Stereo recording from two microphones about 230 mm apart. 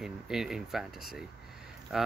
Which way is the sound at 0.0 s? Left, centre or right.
Centre.